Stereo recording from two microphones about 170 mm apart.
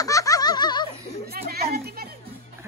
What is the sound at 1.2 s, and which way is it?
Speech, 65° right (ahead or behind).